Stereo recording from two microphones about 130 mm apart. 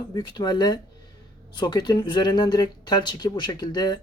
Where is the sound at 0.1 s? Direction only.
35° left (ahead or behind).